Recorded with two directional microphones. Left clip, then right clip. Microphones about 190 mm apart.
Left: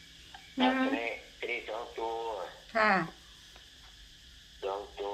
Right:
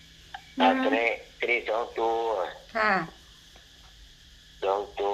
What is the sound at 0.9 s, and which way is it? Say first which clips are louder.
Speech: right 9 dB; 55° right (ahead or behind).